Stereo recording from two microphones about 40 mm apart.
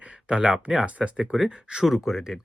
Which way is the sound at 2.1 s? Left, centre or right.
Centre.